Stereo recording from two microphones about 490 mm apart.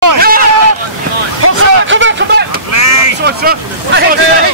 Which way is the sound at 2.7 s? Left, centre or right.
Left.